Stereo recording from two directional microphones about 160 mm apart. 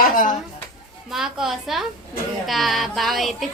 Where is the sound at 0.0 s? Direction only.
55° left (ahead or behind).